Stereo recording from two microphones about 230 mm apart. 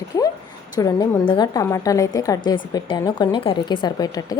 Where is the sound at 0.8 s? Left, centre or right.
Centre.